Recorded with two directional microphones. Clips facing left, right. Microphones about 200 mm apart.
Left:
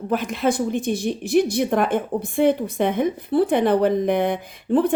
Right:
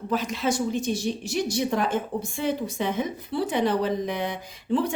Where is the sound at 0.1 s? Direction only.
55° left (ahead or behind).